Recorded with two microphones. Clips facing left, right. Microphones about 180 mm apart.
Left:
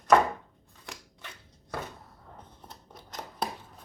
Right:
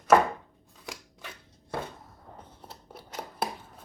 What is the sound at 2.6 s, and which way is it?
Scissors, 10° right (ahead or behind).